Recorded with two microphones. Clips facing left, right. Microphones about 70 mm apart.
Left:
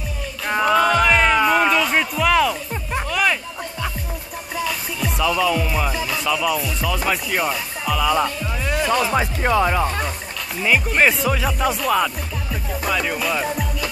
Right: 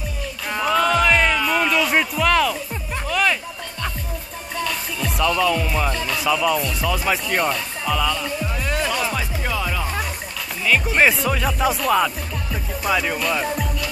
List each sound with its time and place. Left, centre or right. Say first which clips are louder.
0.5 s music: left 3 dB; centre
4.6 s music: left 1 dB; centre
7.1 s speech: right 1 dB; centre
8.6 s music: left 4 dB; centre
9.1 s speech: left 7 dB; left
10.9 s speech: even; centre
12.8 s music: right 1 dB; centre